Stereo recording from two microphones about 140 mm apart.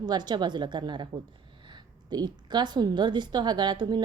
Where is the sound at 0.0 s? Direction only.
30° right (ahead or behind).